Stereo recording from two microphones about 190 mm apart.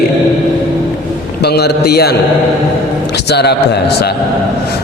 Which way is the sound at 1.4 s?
60° left (ahead or behind).